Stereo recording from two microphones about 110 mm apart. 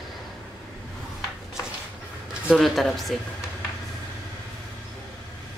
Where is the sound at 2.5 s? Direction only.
Centre (ahead or behind).